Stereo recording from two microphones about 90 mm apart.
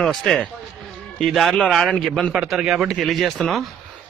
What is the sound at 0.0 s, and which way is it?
Speech, 5° left (ahead or behind).